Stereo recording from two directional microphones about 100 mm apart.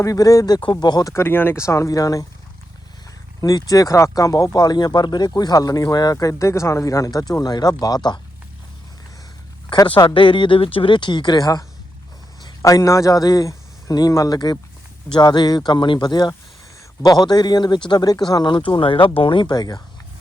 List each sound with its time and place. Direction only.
0.0 s speech: 35° left (ahead or behind)
1.1 s speech: 20° left (ahead or behind)
3.4 s speech: 35° left (ahead or behind)
10.2 s a man's voice: 55° left (ahead or behind)